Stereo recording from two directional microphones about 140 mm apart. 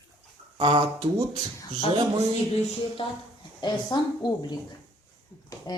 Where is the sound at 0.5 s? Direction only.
40° right (ahead or behind).